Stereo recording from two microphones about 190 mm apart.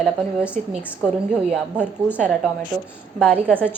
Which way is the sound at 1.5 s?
5° right (ahead or behind).